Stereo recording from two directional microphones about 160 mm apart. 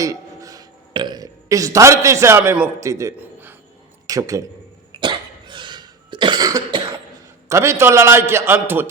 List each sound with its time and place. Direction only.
0.0 s a man's voice: 20° right (ahead or behind)
4.9 s cough: 30° right (ahead or behind)
7.4 s a man's voice: 20° right (ahead or behind)